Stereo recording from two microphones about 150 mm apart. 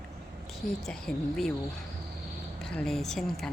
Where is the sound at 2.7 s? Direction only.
5° left (ahead or behind).